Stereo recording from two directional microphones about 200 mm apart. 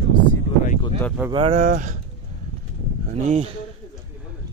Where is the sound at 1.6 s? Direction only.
40° right (ahead or behind).